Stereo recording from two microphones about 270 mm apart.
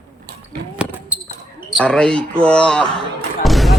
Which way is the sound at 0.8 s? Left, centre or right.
Centre.